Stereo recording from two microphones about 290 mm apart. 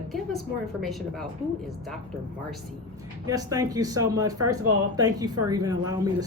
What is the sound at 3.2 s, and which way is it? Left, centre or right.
Speech, centre.